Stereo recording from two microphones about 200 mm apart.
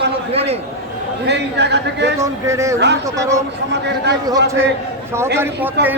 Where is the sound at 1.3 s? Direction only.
60° right (ahead or behind).